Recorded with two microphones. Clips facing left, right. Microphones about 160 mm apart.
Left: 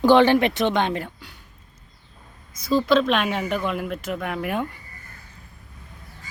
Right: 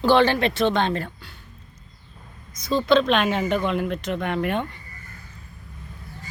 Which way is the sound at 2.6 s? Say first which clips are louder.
Even; 5° left (ahead or behind).